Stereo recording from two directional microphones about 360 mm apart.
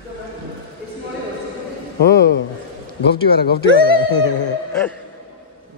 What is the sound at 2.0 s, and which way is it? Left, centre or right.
Speech, left.